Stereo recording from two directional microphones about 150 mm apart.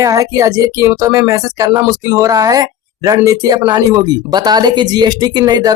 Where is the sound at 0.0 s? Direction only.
20° right (ahead or behind).